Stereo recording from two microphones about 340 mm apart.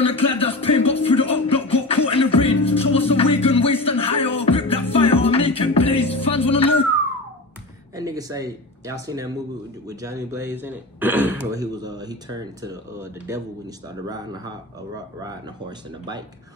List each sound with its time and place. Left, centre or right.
0.0 s music: centre
7.9 s speech: centre